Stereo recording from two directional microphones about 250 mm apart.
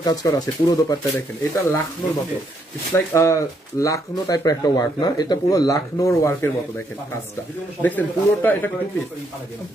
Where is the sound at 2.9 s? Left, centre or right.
Centre.